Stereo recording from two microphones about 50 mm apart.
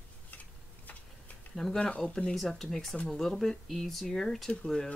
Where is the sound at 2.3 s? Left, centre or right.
Centre.